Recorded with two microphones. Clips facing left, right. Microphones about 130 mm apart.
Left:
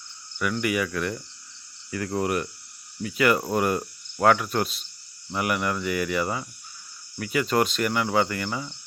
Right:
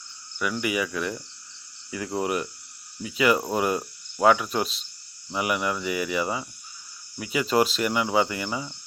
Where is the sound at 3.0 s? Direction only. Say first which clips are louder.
Even; 5° right (ahead or behind).